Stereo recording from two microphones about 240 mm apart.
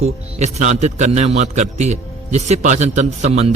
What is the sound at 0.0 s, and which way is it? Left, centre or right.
A man's voice, right.